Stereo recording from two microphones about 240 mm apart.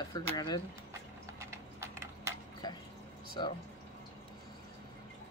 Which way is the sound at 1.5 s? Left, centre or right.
Centre.